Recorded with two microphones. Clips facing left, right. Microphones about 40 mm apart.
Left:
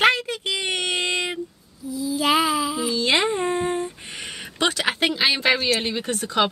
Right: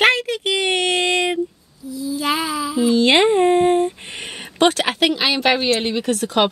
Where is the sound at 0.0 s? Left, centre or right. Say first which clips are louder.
Right 3 dB; right.